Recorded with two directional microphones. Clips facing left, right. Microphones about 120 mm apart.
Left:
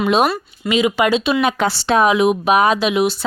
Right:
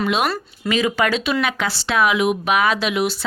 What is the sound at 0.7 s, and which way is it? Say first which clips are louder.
Speech: left 3 dB; 20° left (ahead or behind).